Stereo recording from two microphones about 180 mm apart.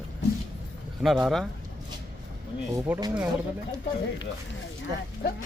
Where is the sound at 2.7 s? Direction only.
20° right (ahead or behind).